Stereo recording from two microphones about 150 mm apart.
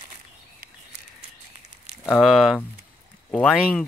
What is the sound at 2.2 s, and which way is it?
Speech, centre (ahead or behind).